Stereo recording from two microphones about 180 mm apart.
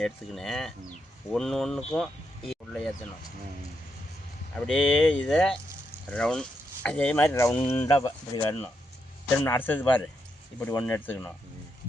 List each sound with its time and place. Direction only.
0.0 s speech: centre (ahead or behind)
4.6 s speech: 5° left (ahead or behind)